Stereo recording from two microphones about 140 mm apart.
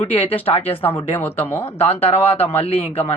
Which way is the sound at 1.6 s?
45° left (ahead or behind).